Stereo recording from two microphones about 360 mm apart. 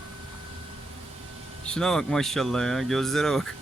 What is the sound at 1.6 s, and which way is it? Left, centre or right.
Speech, centre.